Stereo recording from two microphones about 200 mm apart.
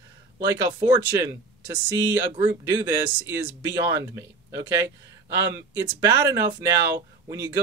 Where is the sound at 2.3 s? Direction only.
15° right (ahead or behind).